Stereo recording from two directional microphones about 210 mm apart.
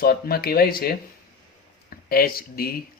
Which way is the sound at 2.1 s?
45° left (ahead or behind).